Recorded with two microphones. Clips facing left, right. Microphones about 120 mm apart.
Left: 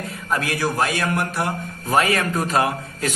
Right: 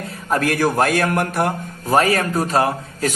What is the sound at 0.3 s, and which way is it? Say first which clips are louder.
A man's voice: right 5 dB; 50° right (ahead or behind).